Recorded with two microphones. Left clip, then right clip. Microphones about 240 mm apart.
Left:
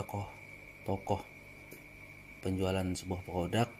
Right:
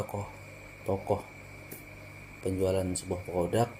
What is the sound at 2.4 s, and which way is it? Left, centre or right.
Speech, left.